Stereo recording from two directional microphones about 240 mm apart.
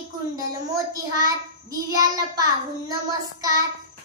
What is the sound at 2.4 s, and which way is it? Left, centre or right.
A child's voice, centre.